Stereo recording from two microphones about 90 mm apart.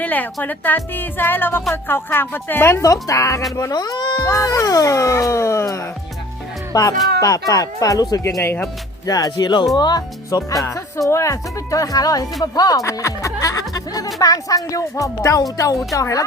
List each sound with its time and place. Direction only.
0.0 s speech: 20° left (ahead or behind)
2.8 s speech: 40° left (ahead or behind)
4.3 s speech: 35° left (ahead or behind)
9.0 s speech: 45° left (ahead or behind)